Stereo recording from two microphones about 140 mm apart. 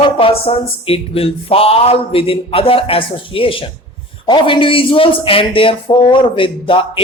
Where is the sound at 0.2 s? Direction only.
40° left (ahead or behind).